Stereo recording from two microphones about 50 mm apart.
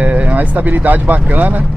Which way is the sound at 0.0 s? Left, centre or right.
Right.